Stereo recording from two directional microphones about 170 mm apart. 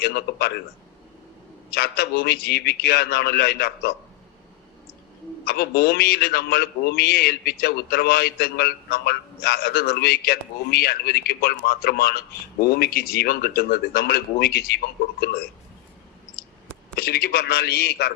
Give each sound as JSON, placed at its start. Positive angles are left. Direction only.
{"t": 0.0, "sound": "a man's voice", "side_deg": 70}
{"t": 1.7, "sound": "a man's voice", "side_deg": 70}
{"t": 5.5, "sound": "a man's voice", "side_deg": 70}
{"t": 16.9, "sound": "a man's voice", "side_deg": 65}